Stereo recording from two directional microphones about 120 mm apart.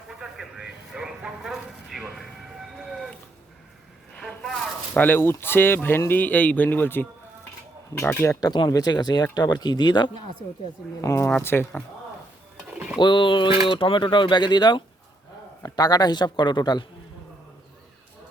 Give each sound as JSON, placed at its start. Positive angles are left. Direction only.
{"t": 0.2, "sound": "vehicle", "side_deg": -5}
{"t": 4.2, "sound": "a sound", "side_deg": 5}
{"t": 4.9, "sound": "speech", "side_deg": 15}
{"t": 11.0, "sound": "speech", "side_deg": 25}
{"t": 12.5, "sound": "a sound", "side_deg": -5}
{"t": 13.0, "sound": "speech", "side_deg": 40}